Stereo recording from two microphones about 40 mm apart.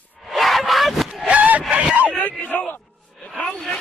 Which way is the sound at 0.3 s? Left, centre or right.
Centre.